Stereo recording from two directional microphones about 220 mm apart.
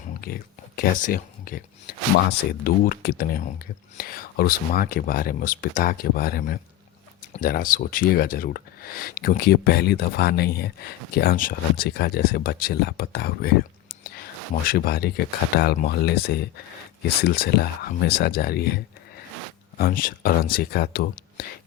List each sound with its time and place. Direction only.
0.8 s speech: 40° left (ahead or behind)
14.7 s speech: 45° left (ahead or behind)